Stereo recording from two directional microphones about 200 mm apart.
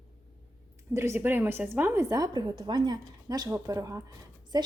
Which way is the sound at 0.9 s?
15° right (ahead or behind).